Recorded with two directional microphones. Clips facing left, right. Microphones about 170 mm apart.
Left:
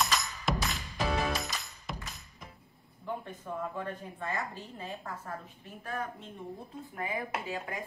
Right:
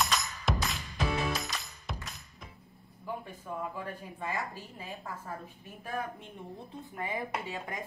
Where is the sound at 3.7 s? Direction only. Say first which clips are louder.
Left 2 dB; 10° right (ahead or behind).